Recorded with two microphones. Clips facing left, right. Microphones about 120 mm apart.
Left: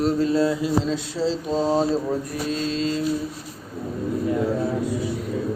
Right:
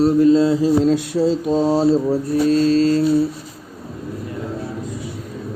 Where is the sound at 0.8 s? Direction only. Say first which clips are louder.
Right 8 dB; 55° right (ahead or behind).